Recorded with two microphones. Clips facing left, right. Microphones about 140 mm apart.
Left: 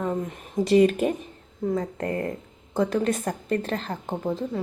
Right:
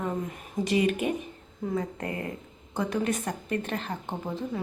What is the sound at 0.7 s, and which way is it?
Speech, 40° left (ahead or behind).